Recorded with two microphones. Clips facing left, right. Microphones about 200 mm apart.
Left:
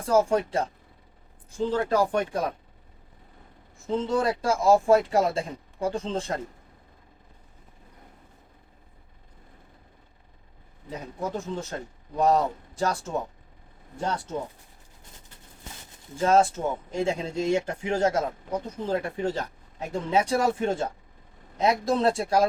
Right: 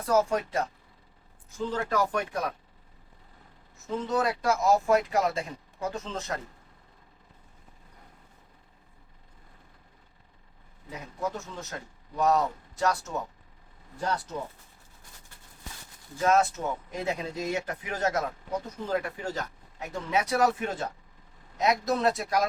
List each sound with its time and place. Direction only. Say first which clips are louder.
0.0 s speech: left 3 dB; 30° left (ahead or behind)
3.8 s speech: left 3 dB; 30° left (ahead or behind)
10.8 s speech: left 1 dB; 30° left (ahead or behind)
16.1 s speech: left 3 dB; 30° left (ahead or behind)